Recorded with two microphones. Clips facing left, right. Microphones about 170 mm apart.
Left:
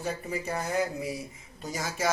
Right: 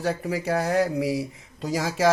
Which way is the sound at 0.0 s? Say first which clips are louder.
Right 6 dB; 80° right.